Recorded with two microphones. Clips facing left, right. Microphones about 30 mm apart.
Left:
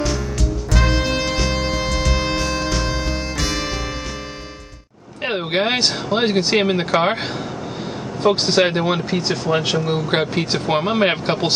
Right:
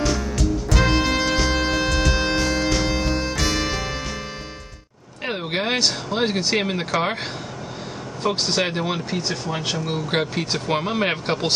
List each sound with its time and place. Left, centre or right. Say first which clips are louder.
0.0 s music: even; centre
5.2 s a sound: left 5 dB; centre
5.8 s speech: left 3 dB; left
8.2 s speech: left 6 dB; left
9.8 s speech: left 4 dB; centre